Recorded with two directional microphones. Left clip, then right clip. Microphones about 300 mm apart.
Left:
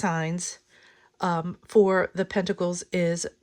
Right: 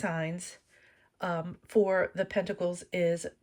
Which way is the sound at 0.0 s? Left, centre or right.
Centre.